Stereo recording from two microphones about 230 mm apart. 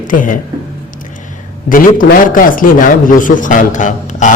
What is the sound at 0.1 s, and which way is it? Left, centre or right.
Speech, left.